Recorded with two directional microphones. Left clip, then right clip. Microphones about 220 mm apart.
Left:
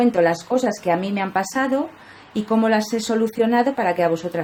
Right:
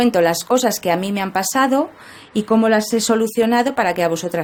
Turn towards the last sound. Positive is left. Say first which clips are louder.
# right 1 dB
turn(degrees=-35)  # may be behind; listen again after turning